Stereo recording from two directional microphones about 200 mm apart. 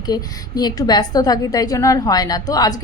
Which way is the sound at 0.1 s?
20° left (ahead or behind).